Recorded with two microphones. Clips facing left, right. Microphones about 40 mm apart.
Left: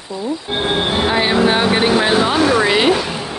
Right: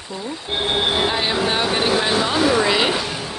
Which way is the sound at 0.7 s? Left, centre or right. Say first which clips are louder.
Left 3 dB; centre.